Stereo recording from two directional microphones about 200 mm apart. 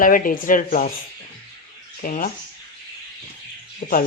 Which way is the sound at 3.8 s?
35° left (ahead or behind).